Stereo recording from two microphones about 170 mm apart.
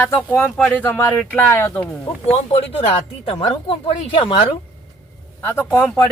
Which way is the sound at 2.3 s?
40° left (ahead or behind).